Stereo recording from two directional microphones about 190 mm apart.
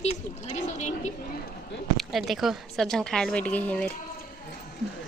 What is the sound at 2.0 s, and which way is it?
A woman's voice, centre (ahead or behind).